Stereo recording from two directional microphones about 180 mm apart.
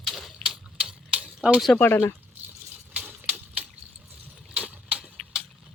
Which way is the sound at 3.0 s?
10° right (ahead or behind).